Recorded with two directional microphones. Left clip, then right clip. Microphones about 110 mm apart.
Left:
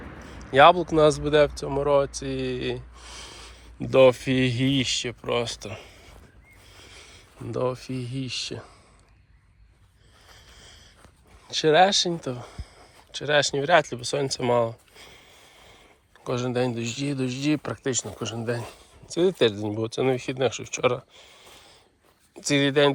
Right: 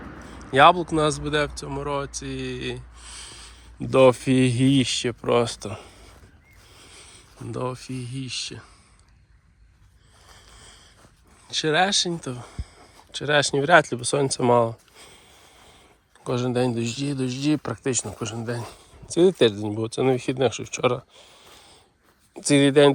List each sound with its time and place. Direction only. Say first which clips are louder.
0.2 s speech: even; 60° right (ahead or behind); by 3.7 s 20° right (ahead or behind)
3.8 s speech: even; 40° right (ahead or behind)
4.1 s speech: right 3 dB; 60° right (ahead or behind)
6.7 s horse: even; 40° right (ahead or behind)
7.4 s speech: left 3 dB; 35° right (ahead or behind); by 8.7 s 15° right (ahead or behind)
10.3 s a sound: right 1 dB; 75° right (ahead or behind)
11.4 s speech: left 3 dB; 35° right (ahead or behind); by 17.0 s 50° right (ahead or behind)
17.0 s speech: right 1 dB; 35° right (ahead or behind)
18.3 s speech: left 4 dB; 25° right (ahead or behind)
19.0 s speech: right 3 dB; 70° right (ahead or behind); by 21.8 s 55° right (ahead or behind)
22.4 s speech: right 4 dB; 70° right (ahead or behind)